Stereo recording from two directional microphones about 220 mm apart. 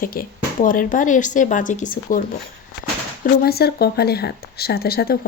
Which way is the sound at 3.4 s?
45° left (ahead or behind).